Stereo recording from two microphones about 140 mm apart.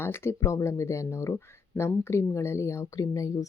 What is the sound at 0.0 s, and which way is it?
Speech, 15° left (ahead or behind).